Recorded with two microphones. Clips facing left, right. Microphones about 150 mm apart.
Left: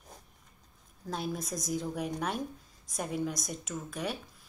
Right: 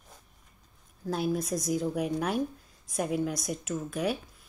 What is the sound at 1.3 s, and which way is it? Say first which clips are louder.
Speech: right 6 dB; 65° right (ahead or behind).